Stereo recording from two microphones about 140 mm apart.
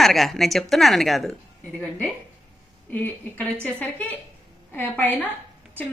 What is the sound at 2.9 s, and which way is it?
A woman's voice, 10° left (ahead or behind).